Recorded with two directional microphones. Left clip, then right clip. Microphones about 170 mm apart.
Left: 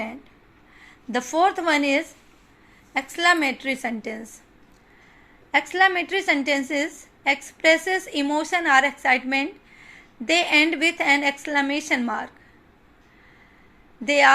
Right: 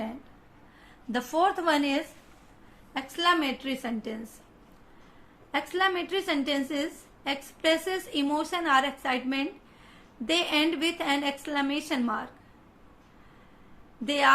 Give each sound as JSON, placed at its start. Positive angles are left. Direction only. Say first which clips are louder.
{"t": 1.1, "sound": "a woman's voice", "louder": "left 5 dB", "side_deg": 25}
{"t": 5.5, "sound": "a woman's voice", "louder": "left 8 dB", "side_deg": 25}
{"t": 14.0, "sound": "a woman's voice", "louder": "left 6 dB", "side_deg": 25}